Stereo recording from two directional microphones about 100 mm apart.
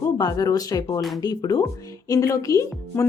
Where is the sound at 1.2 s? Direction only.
40° left (ahead or behind).